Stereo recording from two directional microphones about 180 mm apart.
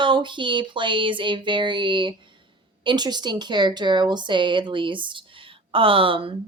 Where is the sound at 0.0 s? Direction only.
25° right (ahead or behind).